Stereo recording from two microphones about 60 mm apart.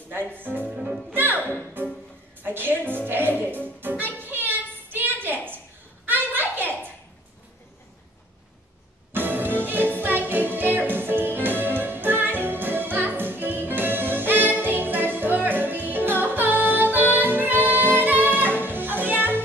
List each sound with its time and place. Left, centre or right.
0.3 s speech: right
1.1 s music: right
2.4 s a woman's voice: right
4.2 s a sound: right
9.1 s music: right